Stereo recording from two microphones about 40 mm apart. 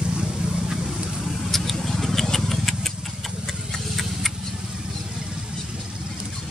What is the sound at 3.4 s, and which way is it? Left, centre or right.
Tick-tock, centre.